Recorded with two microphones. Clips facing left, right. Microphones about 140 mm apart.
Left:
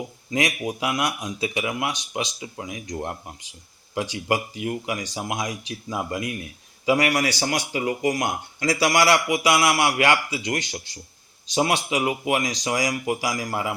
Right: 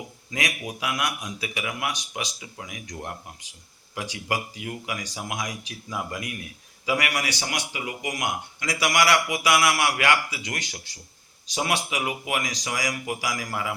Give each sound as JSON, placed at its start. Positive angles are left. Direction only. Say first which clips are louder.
{"t": 0.3, "sound": "speech", "louder": "left 6 dB", "side_deg": 25}